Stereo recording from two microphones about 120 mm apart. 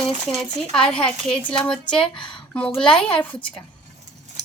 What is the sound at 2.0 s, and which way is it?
Speech, 45° left (ahead or behind).